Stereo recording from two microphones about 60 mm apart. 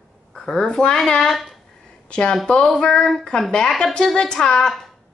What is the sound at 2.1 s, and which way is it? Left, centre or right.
Speech, centre.